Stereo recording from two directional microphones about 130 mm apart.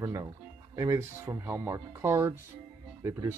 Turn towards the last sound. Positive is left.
turn(degrees=-20)  # may be behind; listen again after turning